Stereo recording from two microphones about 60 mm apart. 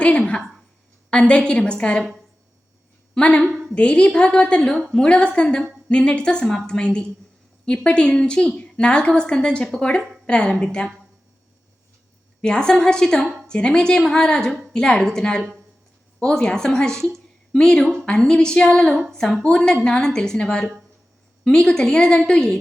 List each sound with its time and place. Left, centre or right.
0.0 s a woman's voice: centre
3.2 s a woman's voice: centre
12.4 s a woman's voice: centre